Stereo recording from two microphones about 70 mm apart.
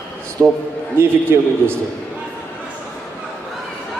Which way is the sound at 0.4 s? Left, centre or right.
Right.